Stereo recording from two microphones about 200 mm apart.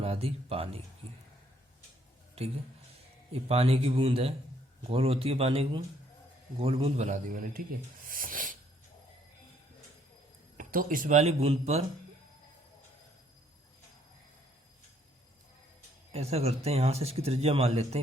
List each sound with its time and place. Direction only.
0.0 s a man's voice: 30° right (ahead or behind)
3.3 s a man's voice: 30° right (ahead or behind)
8.0 s a sound: 45° right (ahead or behind)
10.6 s speech: 45° right (ahead or behind)
16.1 s speech: 30° right (ahead or behind)